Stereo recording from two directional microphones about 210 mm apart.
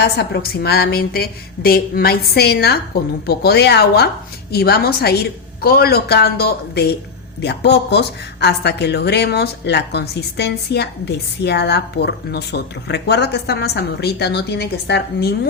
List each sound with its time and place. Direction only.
0.0 s speech: 50° left (ahead or behind)